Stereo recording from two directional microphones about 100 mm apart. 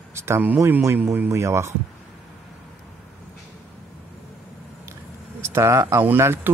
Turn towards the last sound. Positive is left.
turn(degrees=-25)  # may be behind; listen again after turning